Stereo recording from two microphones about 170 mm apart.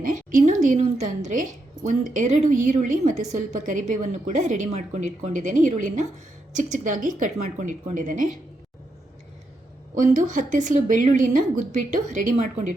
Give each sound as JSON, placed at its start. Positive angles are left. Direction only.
{"t": 0.3, "sound": "a woman's voice", "side_deg": -50}
{"t": 10.2, "sound": "a woman's voice", "side_deg": -50}